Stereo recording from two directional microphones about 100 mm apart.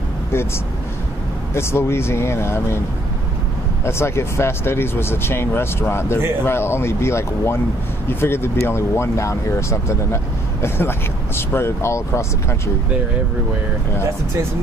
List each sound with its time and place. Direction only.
1.5 s speech: 25° left (ahead or behind)
3.8 s speech: 25° left (ahead or behind)